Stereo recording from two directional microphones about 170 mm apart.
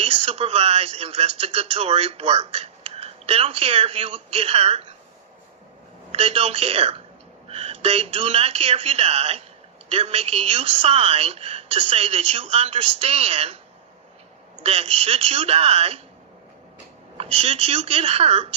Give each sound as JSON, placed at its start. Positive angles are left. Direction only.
{"t": 0.0, "sound": "speech", "side_deg": -35}
{"t": 6.1, "sound": "speech", "side_deg": -35}
{"t": 14.6, "sound": "speech", "side_deg": -35}
{"t": 17.2, "sound": "speech", "side_deg": -35}